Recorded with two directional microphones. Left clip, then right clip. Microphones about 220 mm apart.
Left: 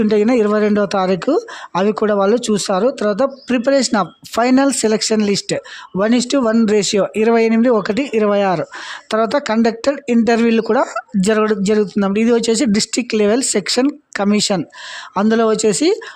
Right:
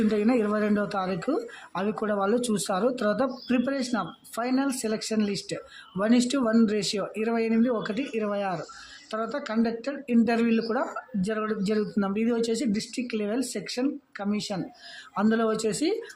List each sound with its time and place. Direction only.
0.1 s speech: 40° left (ahead or behind)